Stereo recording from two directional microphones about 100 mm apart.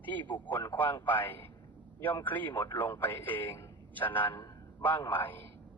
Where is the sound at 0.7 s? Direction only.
20° left (ahead or behind).